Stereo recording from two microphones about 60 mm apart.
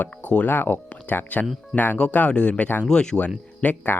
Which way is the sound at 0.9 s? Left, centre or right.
Left.